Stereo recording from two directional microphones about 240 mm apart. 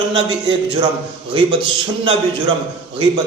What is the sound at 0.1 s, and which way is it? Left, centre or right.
A man's voice, right.